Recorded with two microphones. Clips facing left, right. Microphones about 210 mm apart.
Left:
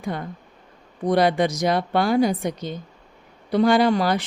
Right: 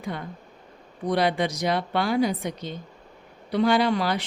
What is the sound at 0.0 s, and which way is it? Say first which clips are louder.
Speech: left 4 dB; 45° left (ahead or behind).